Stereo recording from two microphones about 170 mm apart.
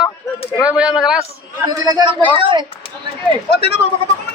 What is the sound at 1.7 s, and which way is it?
Speech, 20° right (ahead or behind).